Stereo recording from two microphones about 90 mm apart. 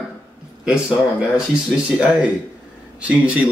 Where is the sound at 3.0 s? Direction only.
15° right (ahead or behind).